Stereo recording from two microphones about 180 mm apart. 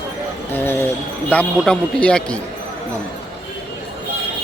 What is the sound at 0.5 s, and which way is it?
Speech, 10° left (ahead or behind).